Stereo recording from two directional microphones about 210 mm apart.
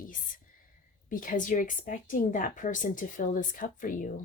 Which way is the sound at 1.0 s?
40° left (ahead or behind).